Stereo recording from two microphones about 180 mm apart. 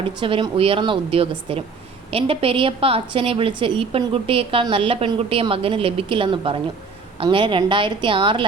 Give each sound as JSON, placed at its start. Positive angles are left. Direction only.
{"t": 0.2, "sound": "a woman's voice", "side_deg": -30}